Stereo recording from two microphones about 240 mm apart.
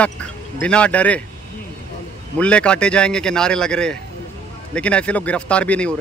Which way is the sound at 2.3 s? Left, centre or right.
Centre.